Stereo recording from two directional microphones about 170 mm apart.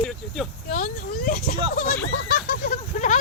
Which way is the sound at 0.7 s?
55° left (ahead or behind).